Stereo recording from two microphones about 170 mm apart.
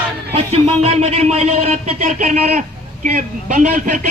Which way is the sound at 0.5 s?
35° right (ahead or behind).